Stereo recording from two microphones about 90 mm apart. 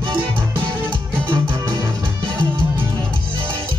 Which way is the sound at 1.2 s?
65° right (ahead or behind).